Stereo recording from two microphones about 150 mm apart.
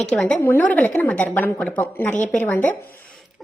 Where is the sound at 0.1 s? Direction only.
5° left (ahead or behind).